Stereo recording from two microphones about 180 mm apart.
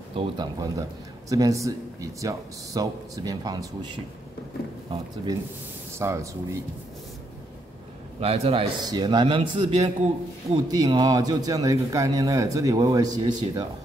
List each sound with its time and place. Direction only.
0.1 s a man's voice: 25° right (ahead or behind)
8.2 s a man's voice: 35° right (ahead or behind)
8.8 s a man's voice: 25° right (ahead or behind)